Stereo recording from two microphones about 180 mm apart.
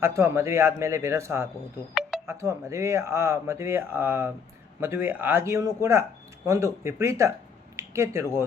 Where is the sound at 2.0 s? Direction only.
5° right (ahead or behind).